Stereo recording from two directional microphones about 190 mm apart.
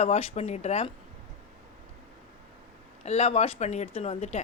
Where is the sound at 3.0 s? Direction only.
35° left (ahead or behind).